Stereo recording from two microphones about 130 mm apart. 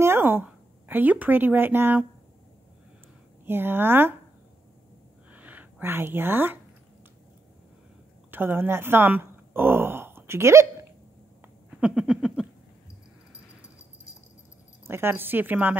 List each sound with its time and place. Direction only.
0.0 s speech: 20° right (ahead or behind)
3.4 s speech: 15° right (ahead or behind)
5.3 s a sound: 10° right (ahead or behind)
8.3 s speech: 15° right (ahead or behind)
11.8 s a sound: 5° right (ahead or behind)
14.9 s speech: 20° right (ahead or behind)